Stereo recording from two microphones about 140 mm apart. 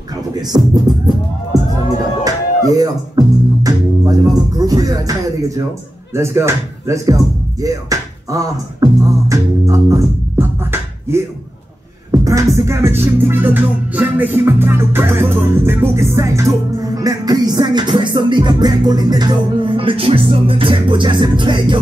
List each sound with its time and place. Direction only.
0.5 s speech: 25° right (ahead or behind)
2.7 s music: 25° right (ahead or behind)
6.1 s speech: 20° right (ahead or behind)
7.6 s music: 25° right (ahead or behind)